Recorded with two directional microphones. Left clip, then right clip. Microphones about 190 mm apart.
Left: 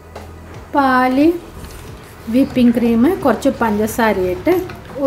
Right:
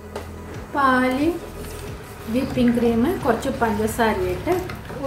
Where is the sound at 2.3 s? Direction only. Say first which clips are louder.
Left 7 dB; 45° left (ahead or behind).